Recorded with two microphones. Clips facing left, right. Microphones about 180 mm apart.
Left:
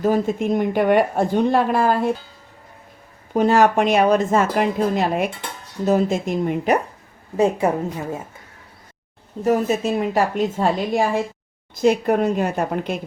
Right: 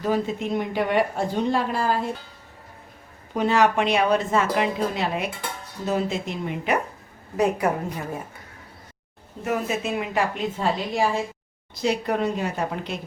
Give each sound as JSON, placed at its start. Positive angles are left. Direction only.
{"t": 0.0, "sound": "speech", "side_deg": 45}
{"t": 3.3, "sound": "speech", "side_deg": 45}
{"t": 7.3, "sound": "a woman's voice", "side_deg": 25}
{"t": 9.4, "sound": "a woman's voice", "side_deg": 35}